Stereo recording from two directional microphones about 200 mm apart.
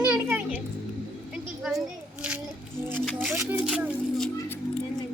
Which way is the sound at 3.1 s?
10° right (ahead or behind).